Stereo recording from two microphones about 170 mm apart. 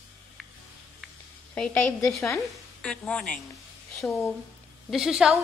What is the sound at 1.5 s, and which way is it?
A woman's voice, 10° left (ahead or behind).